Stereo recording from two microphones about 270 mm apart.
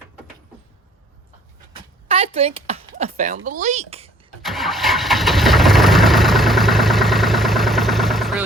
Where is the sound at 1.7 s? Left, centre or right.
Right.